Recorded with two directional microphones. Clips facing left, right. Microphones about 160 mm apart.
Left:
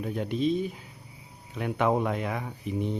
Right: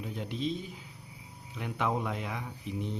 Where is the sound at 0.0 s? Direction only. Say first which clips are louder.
Left 7 dB; 55° left (ahead or behind).